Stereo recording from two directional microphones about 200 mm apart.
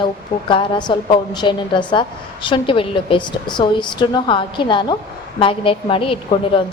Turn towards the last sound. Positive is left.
turn(degrees=25)  # may be behind; listen again after turning